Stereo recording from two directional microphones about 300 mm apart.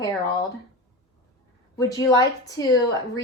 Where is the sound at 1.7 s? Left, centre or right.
Centre.